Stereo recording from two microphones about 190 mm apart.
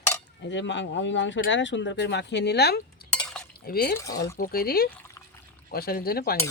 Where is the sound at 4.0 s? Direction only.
15° left (ahead or behind).